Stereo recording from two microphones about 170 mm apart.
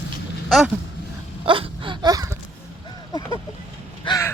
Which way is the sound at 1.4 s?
30° right (ahead or behind).